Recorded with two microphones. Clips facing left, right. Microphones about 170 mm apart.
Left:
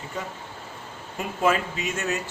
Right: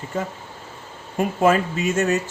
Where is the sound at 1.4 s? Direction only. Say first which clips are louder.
Right 5 dB; 45° right (ahead or behind).